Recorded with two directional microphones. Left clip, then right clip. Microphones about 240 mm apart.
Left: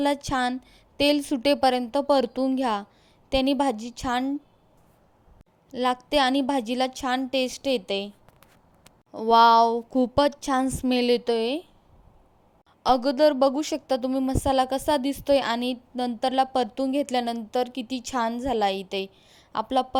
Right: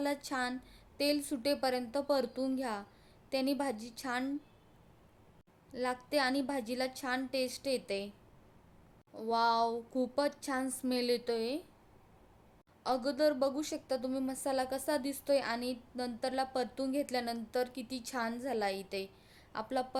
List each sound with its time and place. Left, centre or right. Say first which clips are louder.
0.0 s a woman's voice: left 11 dB; left
5.7 s a woman's voice: left 11 dB; left
9.1 s a woman's voice: left 14 dB; left
12.8 s a woman's voice: left 11 dB; left